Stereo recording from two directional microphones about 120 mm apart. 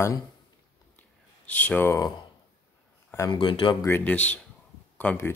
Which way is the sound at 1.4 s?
15° left (ahead or behind).